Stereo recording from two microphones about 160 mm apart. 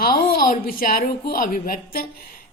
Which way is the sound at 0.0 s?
70° left (ahead or behind).